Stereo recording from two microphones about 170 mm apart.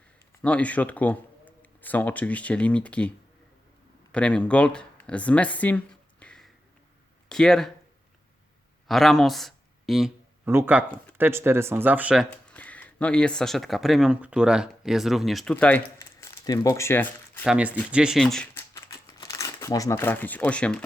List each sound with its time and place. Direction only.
0.4 s speech: 10° left (ahead or behind)
4.1 s speech: 5° left (ahead or behind)
8.9 s speech: centre (ahead or behind)
10.4 s speech: 15° right (ahead or behind)
12.3 s speech: 10° left (ahead or behind)
15.5 s speech: 10° left (ahead or behind)
17.4 s speech: 5° right (ahead or behind)
18.5 s crumpling: 15° left (ahead or behind)